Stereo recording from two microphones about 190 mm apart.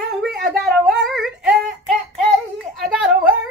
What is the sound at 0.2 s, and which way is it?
Child singing, centre (ahead or behind).